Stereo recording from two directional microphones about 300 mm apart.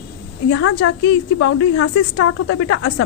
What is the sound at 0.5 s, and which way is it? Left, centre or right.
A woman's voice, left.